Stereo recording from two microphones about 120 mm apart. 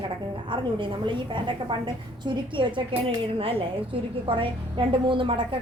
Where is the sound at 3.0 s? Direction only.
50° right (ahead or behind).